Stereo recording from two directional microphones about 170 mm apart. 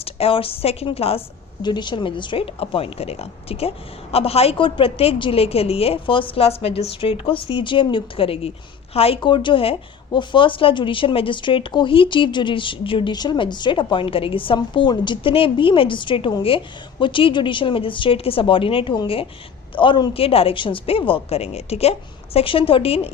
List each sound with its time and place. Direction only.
0.0 s a woman's voice: 35° left (ahead or behind)